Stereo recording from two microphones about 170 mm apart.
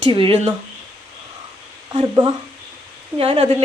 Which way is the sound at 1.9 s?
25° right (ahead or behind).